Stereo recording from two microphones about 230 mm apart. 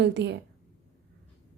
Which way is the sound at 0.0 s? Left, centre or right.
Right.